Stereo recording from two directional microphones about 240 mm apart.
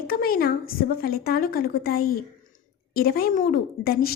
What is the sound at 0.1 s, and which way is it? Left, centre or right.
A woman's voice, left.